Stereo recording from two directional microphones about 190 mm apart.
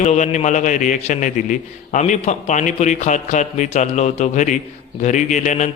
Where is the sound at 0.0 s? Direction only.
40° left (ahead or behind).